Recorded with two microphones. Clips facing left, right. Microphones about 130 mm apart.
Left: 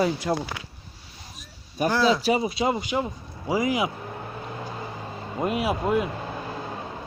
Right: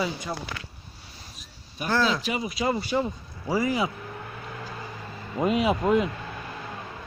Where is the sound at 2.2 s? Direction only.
30° left (ahead or behind); by 3.9 s 15° left (ahead or behind).